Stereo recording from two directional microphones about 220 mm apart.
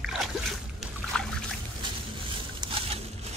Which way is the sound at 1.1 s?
5° left (ahead or behind).